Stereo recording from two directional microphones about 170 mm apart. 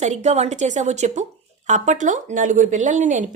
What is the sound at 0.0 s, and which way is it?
A woman's voice, 45° right (ahead or behind).